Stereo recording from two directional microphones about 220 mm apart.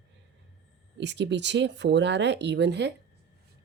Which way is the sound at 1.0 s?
50° right (ahead or behind).